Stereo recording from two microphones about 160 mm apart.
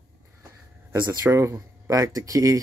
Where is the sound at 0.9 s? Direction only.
20° right (ahead or behind).